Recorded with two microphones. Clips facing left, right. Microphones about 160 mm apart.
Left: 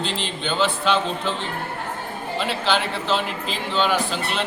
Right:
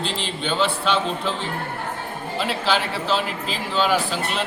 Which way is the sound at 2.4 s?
5° right (ahead or behind).